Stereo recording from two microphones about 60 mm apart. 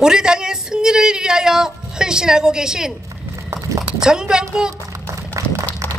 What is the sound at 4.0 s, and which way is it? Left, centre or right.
Speech, centre.